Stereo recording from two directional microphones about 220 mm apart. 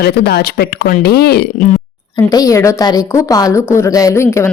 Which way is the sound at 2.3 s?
15° left (ahead or behind).